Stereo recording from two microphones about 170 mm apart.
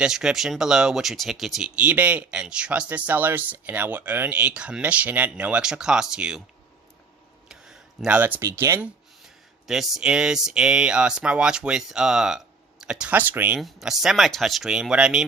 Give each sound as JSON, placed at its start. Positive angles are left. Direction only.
{"t": 0.0, "sound": "speech", "side_deg": -5}
{"t": 7.4, "sound": "a sound", "side_deg": -5}
{"t": 9.2, "sound": "speech", "side_deg": 0}
{"t": 13.6, "sound": "speech", "side_deg": 0}